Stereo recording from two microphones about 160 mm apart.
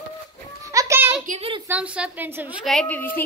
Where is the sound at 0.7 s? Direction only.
20° right (ahead or behind).